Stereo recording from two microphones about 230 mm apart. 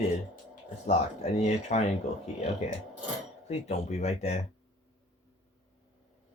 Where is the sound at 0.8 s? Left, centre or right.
Left.